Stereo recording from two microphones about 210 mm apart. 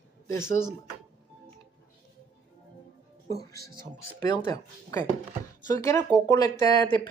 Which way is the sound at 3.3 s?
15° left (ahead or behind).